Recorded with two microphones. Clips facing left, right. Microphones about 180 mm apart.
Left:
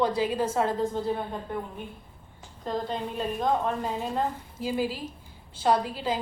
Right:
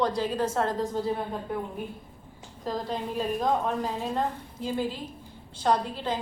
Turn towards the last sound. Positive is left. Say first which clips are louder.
# left 1 dB
turn(degrees=5)  # may be behind; listen again after turning